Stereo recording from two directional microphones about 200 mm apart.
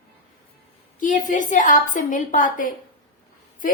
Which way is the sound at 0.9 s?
40° left (ahead or behind).